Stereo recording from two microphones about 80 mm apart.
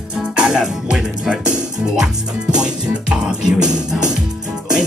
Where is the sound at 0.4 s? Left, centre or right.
Centre.